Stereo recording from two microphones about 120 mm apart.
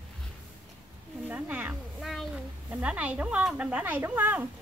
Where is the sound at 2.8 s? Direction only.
10° right (ahead or behind).